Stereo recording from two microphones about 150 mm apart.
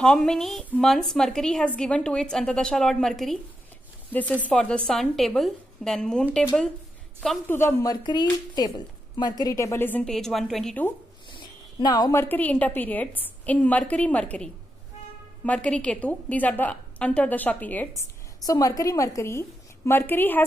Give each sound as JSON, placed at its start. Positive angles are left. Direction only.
{"t": 0.0, "sound": "a woman's voice", "side_deg": 5}
{"t": 11.2, "sound": "a sound", "side_deg": 30}
{"t": 12.2, "sound": "speech", "side_deg": 10}
{"t": 18.4, "sound": "speech", "side_deg": 25}